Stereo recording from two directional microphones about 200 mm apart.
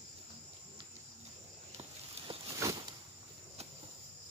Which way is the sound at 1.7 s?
30° right (ahead or behind).